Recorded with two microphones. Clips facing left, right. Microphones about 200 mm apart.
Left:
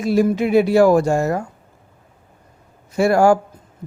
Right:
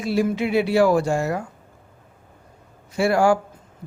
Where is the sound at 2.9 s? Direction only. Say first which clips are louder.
Left 4 dB; 45° left (ahead or behind).